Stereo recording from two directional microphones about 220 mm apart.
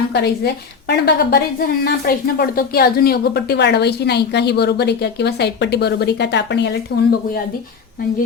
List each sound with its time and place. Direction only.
0.1 s a woman's voice: 50° left (ahead or behind)